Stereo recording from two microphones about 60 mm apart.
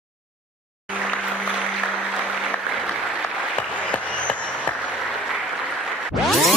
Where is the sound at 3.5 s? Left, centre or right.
Left.